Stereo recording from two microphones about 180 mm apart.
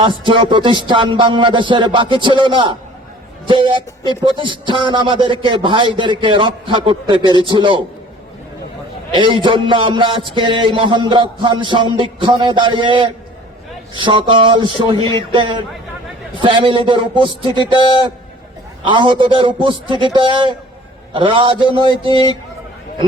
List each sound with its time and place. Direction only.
0.3 s a man's voice: 25° right (ahead or behind)
9.1 s a man's voice: 25° right (ahead or behind)
17.6 s a man's voice: 25° left (ahead or behind)
18.9 s a man's voice: 25° right (ahead or behind)